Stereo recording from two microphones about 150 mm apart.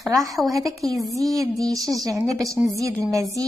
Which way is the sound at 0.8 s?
20° right (ahead or behind).